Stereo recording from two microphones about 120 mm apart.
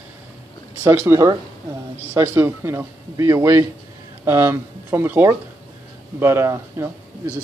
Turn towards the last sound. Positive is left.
turn(degrees=-20)  # may be behind; listen again after turning